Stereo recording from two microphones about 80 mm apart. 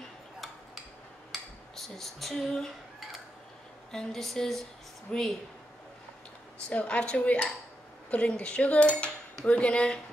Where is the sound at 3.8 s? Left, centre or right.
Centre.